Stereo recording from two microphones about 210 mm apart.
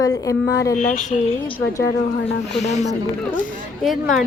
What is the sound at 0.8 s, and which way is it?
Speech, 35° left (ahead or behind).